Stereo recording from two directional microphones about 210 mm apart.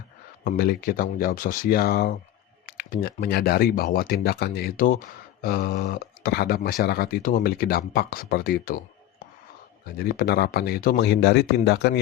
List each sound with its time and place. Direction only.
0.4 s speech: 45° left (ahead or behind)
10.0 s speech: 45° left (ahead or behind)